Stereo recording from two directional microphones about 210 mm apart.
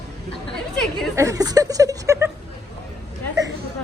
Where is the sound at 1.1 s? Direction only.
15° right (ahead or behind).